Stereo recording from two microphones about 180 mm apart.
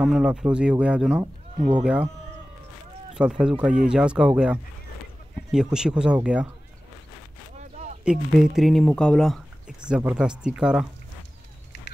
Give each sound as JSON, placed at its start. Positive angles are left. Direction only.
{"t": 0.0, "sound": "speech", "side_deg": -5}
{"t": 3.2, "sound": "speech", "side_deg": -5}
{"t": 7.5, "sound": "a sound", "side_deg": -40}
{"t": 8.0, "sound": "speech", "side_deg": -5}